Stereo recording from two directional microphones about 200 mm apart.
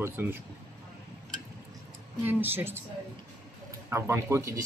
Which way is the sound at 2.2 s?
10° right (ahead or behind).